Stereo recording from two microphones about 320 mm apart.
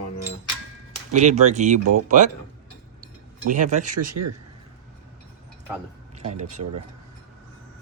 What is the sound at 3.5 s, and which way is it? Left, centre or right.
Speech, right.